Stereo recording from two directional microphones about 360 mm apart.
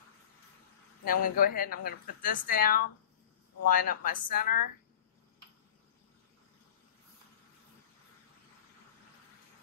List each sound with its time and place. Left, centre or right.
1.0 s a woman's voice: left